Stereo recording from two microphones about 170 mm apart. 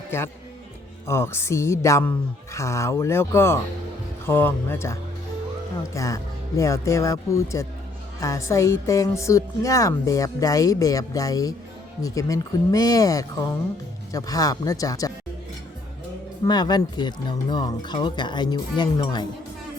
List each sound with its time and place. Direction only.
1.0 s music: 15° left (ahead or behind)
8.2 s a woman's voice: 15° left (ahead or behind)
16.5 s a woman's voice: 25° left (ahead or behind)